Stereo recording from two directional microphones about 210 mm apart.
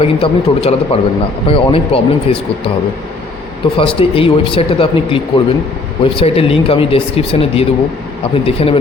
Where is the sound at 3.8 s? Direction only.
25° left (ahead or behind).